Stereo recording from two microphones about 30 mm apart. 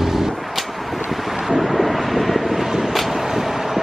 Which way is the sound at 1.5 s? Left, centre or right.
Centre.